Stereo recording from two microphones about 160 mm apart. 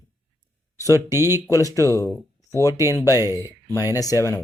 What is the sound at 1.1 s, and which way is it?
Speech, 15° right (ahead or behind).